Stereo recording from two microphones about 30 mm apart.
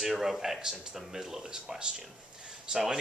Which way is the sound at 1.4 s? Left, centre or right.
Right.